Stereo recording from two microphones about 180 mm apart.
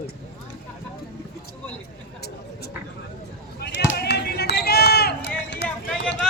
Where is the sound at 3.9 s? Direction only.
65° left (ahead or behind).